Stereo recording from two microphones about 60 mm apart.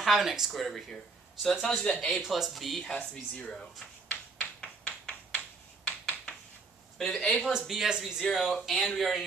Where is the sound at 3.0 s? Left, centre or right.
Centre.